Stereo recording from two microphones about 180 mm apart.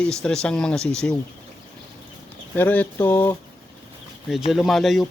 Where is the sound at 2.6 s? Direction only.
10° left (ahead or behind).